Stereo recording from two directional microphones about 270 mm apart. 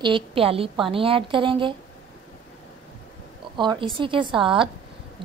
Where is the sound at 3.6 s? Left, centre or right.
Centre.